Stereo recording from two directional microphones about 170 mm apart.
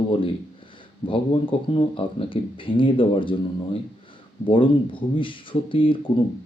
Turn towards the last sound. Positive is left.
turn(degrees=30)  # may be behind; listen again after turning